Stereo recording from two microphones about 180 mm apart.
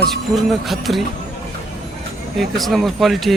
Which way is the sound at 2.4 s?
Centre (ahead or behind).